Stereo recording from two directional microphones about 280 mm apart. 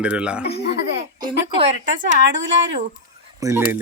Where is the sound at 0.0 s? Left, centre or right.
Centre.